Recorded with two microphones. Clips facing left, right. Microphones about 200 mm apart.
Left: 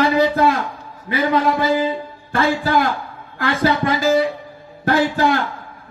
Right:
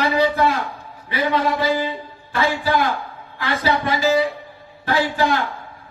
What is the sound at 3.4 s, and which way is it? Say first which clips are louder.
Speech: left 3 dB; 50° left (ahead or behind).